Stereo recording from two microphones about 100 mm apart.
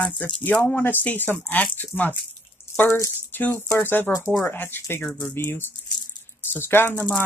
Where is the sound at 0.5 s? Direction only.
15° left (ahead or behind).